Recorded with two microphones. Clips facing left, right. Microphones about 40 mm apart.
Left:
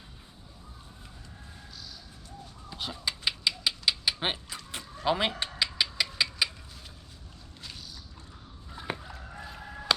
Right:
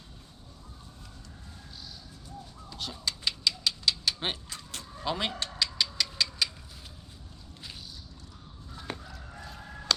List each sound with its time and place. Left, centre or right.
2.6 s typewriter: centre
8.7 s fowl: centre
9.2 s chicken: centre